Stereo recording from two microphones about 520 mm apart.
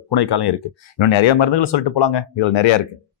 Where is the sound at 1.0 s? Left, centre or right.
Left.